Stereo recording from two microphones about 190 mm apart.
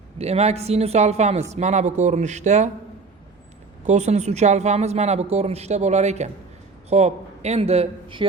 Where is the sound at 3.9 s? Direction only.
35° right (ahead or behind).